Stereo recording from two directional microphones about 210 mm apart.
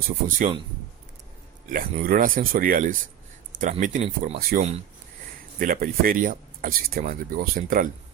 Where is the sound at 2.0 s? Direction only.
40° right (ahead or behind).